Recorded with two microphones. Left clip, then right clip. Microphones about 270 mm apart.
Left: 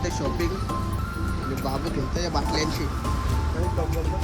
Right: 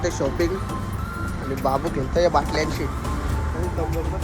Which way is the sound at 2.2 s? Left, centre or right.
Centre.